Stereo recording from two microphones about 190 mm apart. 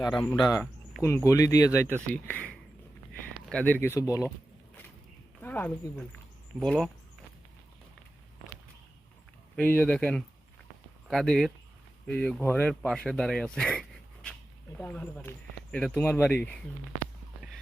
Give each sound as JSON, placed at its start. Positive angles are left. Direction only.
{"t": 0.3, "sound": "speech", "side_deg": 20}
{"t": 5.4, "sound": "speech", "side_deg": 10}
{"t": 6.6, "sound": "a sound", "side_deg": 5}
{"t": 9.6, "sound": "speech", "side_deg": 5}